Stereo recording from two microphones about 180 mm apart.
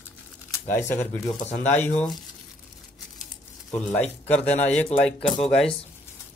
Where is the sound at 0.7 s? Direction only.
15° left (ahead or behind).